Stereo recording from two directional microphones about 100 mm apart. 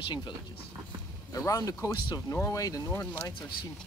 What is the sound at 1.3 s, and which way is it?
Speech, 35° left (ahead or behind).